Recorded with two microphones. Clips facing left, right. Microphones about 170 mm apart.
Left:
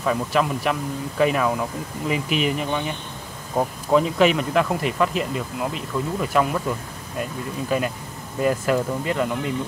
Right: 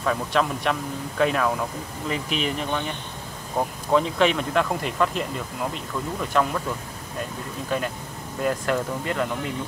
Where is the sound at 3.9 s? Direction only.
5° left (ahead or behind).